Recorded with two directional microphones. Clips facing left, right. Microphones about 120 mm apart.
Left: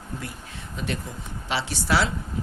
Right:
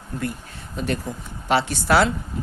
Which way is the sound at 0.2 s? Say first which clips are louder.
Right 9 dB; 55° right (ahead or behind).